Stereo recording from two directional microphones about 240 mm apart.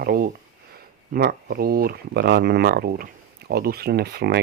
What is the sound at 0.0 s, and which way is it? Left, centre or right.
Speech, right.